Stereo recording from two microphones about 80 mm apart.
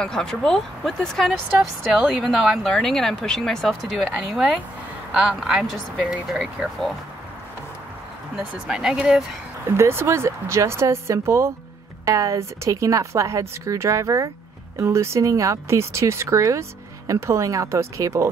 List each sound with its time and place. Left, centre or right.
0.0 s speech: centre
5.5 s speech: centre
8.6 s speech: centre
9.8 s speech: right